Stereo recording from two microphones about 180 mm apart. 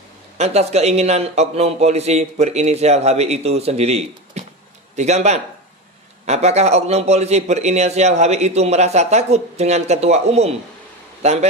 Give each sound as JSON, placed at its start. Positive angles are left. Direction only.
{"t": 0.4, "sound": "a man's voice", "side_deg": -35}